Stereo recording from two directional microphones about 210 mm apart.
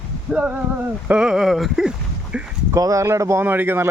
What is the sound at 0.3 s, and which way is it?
Speech, 5° right (ahead or behind).